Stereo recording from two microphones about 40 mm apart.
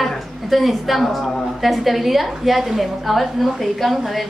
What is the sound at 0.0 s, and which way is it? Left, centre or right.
A woman's voice, centre.